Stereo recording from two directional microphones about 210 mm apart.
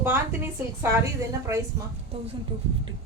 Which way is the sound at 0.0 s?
10° right (ahead or behind).